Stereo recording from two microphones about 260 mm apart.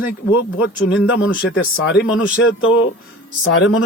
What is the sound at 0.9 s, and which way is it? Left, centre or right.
Speech, left.